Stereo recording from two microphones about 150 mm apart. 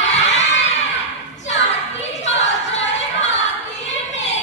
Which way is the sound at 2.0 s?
50° left (ahead or behind).